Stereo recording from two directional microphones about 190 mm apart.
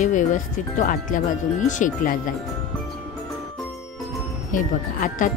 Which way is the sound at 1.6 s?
40° left (ahead or behind).